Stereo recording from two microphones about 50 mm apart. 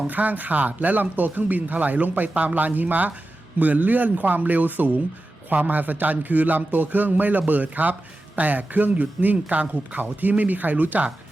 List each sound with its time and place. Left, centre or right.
0.1 s speech: right